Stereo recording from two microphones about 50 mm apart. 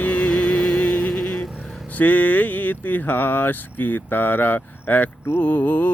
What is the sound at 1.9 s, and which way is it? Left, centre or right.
Speech, left.